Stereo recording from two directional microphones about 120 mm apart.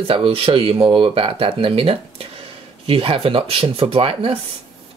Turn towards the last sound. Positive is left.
turn(degrees=-50)  # may be behind; listen again after turning